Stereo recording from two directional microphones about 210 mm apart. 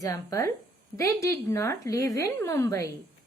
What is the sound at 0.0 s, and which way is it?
A woman's voice, 15° left (ahead or behind).